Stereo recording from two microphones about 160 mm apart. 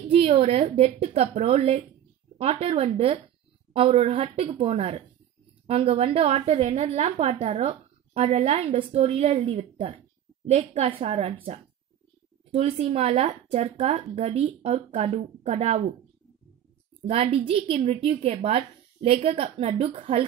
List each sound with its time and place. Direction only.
0.1 s a woman's voice: 40° right (ahead or behind)
12.4 s a woman's voice: 40° right (ahead or behind)
17.1 s a woman's voice: 35° right (ahead or behind)